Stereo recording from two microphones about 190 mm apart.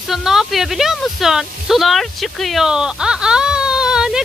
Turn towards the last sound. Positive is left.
turn(degrees=-5)  # may be behind; listen again after turning